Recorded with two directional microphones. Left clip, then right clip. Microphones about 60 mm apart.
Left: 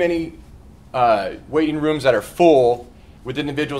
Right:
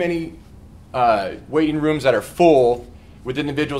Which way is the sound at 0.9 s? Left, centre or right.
Centre.